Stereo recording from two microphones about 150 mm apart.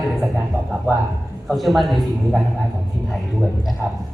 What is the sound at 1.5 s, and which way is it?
A man's voice, centre (ahead or behind).